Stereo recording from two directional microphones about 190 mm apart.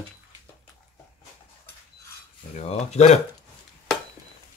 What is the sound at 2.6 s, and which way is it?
Speech, 35° left (ahead or behind).